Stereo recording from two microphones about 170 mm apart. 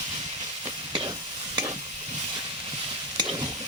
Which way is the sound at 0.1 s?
25° right (ahead or behind).